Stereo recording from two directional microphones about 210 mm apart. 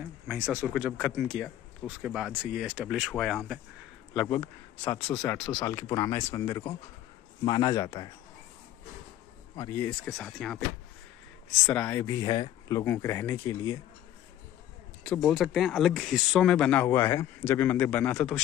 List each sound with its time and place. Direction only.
0.0 s speech: 5° right (ahead or behind)
5.6 s speech: 15° left (ahead or behind)
9.6 s speech: 10° left (ahead or behind)
11.6 s speech: 5° left (ahead or behind)
15.0 s speech: 5° left (ahead or behind)